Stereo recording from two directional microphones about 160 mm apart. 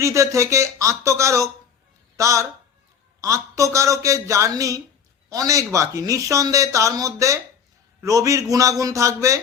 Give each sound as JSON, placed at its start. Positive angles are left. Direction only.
{"t": 0.0, "sound": "speech", "side_deg": -20}